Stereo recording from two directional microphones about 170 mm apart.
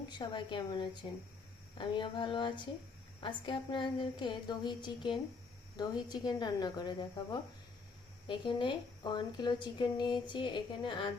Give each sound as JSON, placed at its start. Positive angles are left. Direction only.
{"t": 0.1, "sound": "a woman's voice", "side_deg": 25}
{"t": 8.3, "sound": "a woman's voice", "side_deg": 30}